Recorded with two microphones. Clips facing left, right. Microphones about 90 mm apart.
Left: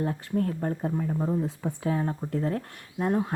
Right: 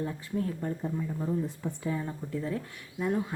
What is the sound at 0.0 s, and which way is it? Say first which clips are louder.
Speech: left 5 dB; 55° left (ahead or behind).